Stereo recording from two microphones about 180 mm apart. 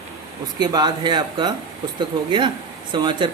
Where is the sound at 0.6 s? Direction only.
25° right (ahead or behind).